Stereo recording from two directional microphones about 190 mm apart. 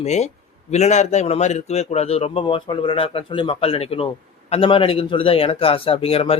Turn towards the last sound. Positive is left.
turn(degrees=30)  # may be behind; listen again after turning